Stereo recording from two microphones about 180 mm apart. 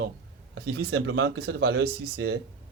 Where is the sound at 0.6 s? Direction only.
70° right (ahead or behind).